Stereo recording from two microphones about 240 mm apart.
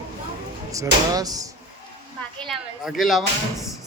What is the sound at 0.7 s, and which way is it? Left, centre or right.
Speech, centre.